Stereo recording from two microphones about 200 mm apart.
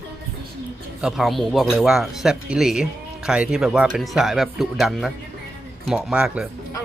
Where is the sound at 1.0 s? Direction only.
Centre (ahead or behind).